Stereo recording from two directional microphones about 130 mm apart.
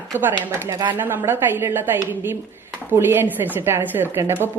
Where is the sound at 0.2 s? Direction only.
15° right (ahead or behind).